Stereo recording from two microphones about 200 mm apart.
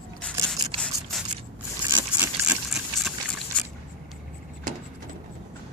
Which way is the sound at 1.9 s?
10° right (ahead or behind).